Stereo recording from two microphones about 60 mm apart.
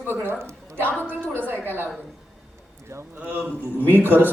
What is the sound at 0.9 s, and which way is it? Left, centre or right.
Speech, left.